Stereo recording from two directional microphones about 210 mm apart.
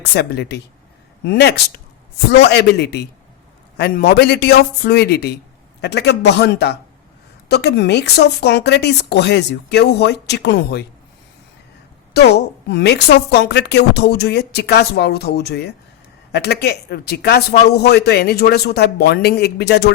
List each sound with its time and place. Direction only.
0.0 s a woman's voice: 50° left (ahead or behind)
12.1 s a woman's voice: 50° left (ahead or behind)